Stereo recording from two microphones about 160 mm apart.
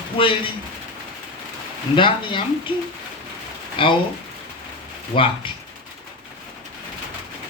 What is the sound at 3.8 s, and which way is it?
Speech, 30° left (ahead or behind).